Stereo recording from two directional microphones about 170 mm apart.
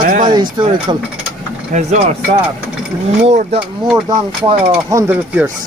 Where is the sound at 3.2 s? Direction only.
40° right (ahead or behind).